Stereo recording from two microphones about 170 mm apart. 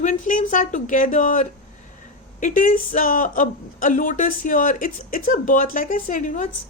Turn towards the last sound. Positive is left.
turn(degrees=50)  # may be behind; listen again after turning